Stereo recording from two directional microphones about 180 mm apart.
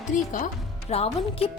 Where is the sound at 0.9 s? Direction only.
35° left (ahead or behind).